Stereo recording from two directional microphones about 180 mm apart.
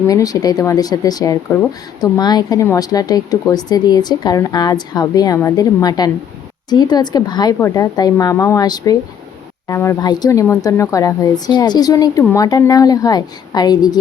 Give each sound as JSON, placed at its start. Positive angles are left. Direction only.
{"t": 0.1, "sound": "speech", "side_deg": 20}